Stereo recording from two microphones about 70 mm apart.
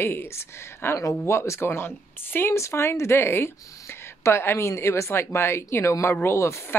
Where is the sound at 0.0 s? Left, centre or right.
Left.